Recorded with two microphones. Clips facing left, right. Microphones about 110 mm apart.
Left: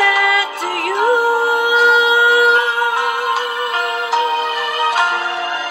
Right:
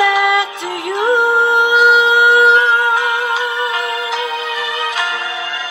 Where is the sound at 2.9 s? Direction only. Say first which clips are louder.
Right 1 dB; 50° left (ahead or behind).